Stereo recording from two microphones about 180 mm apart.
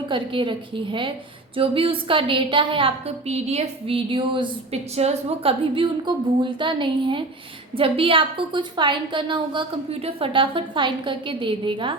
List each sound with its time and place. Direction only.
0.1 s a woman's voice: 30° right (ahead or behind)